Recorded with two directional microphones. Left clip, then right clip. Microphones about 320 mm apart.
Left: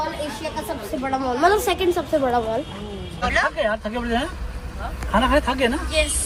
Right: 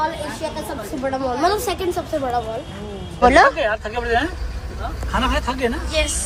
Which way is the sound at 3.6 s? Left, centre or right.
Centre.